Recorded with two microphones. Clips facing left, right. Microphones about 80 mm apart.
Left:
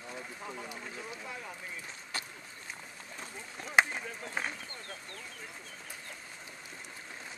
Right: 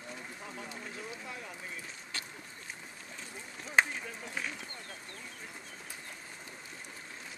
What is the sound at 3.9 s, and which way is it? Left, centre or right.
Speech, left.